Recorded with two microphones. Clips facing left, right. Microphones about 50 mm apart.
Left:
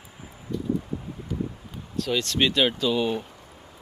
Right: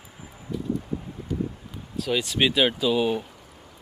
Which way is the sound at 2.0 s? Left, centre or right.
Centre.